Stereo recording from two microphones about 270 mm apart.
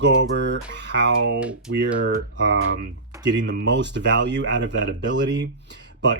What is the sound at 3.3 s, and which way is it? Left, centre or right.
Speech, right.